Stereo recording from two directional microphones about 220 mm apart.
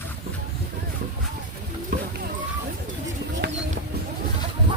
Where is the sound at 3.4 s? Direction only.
45° right (ahead or behind).